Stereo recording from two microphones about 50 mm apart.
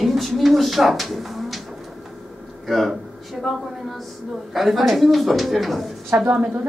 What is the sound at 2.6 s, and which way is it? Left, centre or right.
Speech, centre.